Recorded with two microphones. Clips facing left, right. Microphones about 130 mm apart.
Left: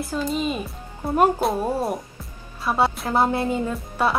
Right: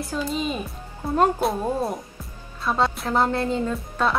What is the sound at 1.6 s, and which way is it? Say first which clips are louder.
Speech: left 1 dB; 10° left (ahead or behind).